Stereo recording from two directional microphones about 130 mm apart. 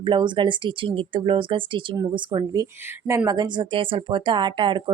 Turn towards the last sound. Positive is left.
turn(degrees=-40)  # may be behind; listen again after turning